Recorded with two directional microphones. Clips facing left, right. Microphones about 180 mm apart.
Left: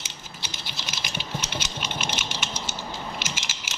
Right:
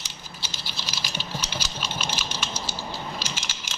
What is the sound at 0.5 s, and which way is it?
Scratch, 20° left (ahead or behind).